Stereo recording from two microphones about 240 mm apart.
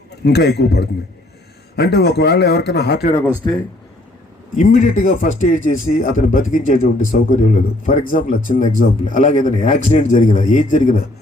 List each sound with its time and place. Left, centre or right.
0.3 s a man's voice: left
4.5 s speech: left